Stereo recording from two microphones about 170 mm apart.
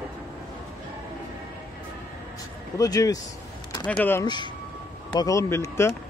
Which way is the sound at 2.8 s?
20° left (ahead or behind).